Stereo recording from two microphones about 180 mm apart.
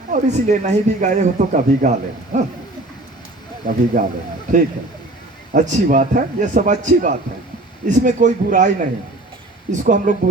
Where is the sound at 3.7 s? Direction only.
50° right (ahead or behind).